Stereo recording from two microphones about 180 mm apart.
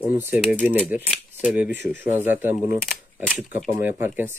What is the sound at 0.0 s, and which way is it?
Speech, 10° right (ahead or behind).